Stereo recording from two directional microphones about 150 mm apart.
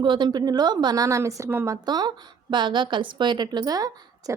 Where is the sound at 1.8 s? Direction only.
30° right (ahead or behind).